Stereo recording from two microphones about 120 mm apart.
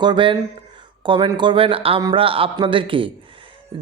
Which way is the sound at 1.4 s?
45° right (ahead or behind).